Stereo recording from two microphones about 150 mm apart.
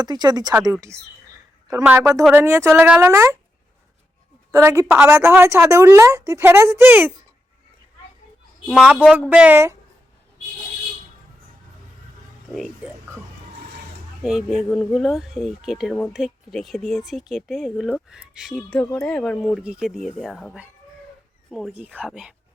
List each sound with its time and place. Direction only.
0.0 s a woman's voice: 30° right (ahead or behind)
4.5 s a woman's voice: 20° right (ahead or behind)
8.6 s a woman's voice: 5° right (ahead or behind)
12.5 s speech: 5° right (ahead or behind)
14.2 s speech: 5° right (ahead or behind)
21.7 s a woman's voice: 10° right (ahead or behind)